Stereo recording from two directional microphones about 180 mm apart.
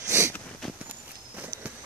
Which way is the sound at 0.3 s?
5° left (ahead or behind).